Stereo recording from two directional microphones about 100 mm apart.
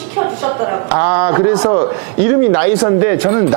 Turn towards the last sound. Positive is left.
turn(degrees=-20)  # may be behind; listen again after turning